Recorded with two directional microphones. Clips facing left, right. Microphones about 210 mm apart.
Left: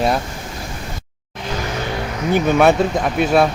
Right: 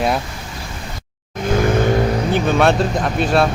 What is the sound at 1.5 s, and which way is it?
Vehicle, 50° right (ahead or behind).